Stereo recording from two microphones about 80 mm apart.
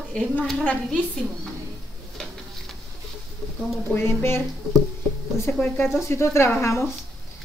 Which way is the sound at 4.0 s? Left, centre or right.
Left.